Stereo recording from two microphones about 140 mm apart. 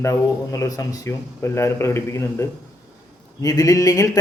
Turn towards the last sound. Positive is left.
turn(degrees=25)  # may be behind; listen again after turning